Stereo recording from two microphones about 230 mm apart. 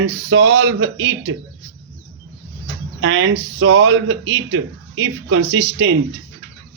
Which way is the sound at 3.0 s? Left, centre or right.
Right.